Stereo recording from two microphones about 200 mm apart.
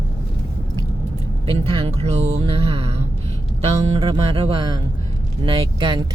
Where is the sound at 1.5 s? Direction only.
25° right (ahead or behind).